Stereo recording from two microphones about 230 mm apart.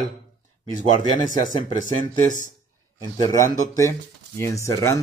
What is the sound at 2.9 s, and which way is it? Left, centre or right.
A man's voice, centre.